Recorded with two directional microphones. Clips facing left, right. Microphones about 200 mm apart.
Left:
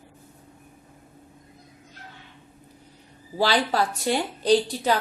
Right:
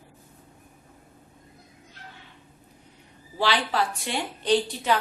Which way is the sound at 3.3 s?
40° left (ahead or behind).